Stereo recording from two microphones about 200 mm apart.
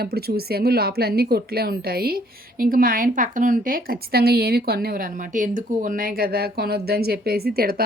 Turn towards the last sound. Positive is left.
turn(degrees=-50)  # may be behind; listen again after turning